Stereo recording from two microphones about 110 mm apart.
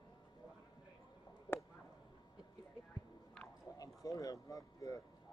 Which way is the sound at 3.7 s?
30° left (ahead or behind).